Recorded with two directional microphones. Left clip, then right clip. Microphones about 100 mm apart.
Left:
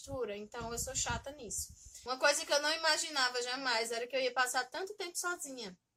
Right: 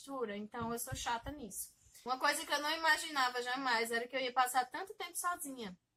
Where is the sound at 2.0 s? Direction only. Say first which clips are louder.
Left 3 dB; 15° left (ahead or behind).